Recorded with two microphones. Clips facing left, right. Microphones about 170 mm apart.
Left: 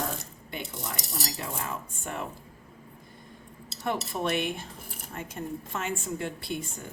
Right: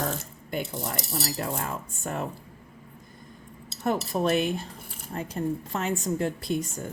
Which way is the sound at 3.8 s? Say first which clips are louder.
Right 4 dB; 40° right (ahead or behind).